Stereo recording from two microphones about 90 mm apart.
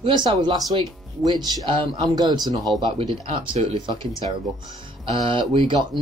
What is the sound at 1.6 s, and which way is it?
Speech, 80° right.